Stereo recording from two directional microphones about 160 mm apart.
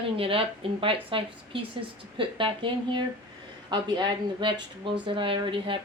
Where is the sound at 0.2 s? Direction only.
35° right (ahead or behind).